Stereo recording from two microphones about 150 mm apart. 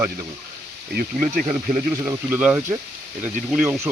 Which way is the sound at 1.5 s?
5° right (ahead or behind).